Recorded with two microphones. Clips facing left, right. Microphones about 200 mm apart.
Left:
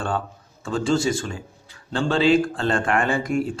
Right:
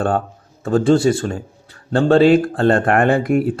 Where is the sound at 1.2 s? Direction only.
45° right (ahead or behind).